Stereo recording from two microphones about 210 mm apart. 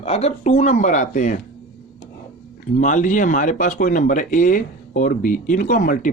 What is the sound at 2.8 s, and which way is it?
Speech, 35° left (ahead or behind).